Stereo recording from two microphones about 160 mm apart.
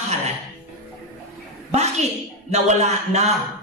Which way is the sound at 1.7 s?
45° right (ahead or behind).